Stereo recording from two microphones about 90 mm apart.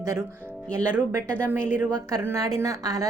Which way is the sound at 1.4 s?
20° right (ahead or behind).